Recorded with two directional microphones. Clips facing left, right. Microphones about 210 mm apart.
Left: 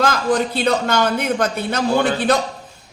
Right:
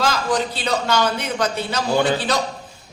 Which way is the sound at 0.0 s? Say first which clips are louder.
Left 3 dB; 55° left (ahead or behind).